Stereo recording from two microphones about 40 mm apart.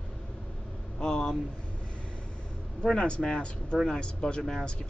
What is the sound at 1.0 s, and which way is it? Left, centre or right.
Speech, centre.